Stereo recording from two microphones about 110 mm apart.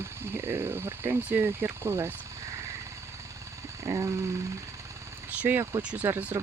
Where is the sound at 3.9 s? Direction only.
30° right (ahead or behind).